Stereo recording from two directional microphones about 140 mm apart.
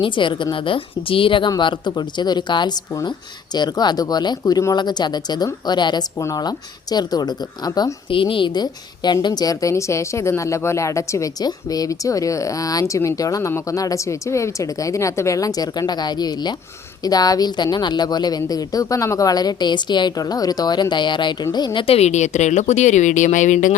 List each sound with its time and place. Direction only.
0.0 s a woman's voice: 35° left (ahead or behind); by 23.7 s 65° left (ahead or behind)